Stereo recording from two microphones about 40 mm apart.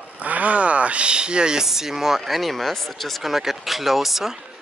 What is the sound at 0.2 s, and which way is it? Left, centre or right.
Speech, right.